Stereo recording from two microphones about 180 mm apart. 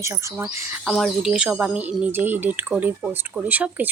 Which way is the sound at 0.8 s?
Centre (ahead or behind).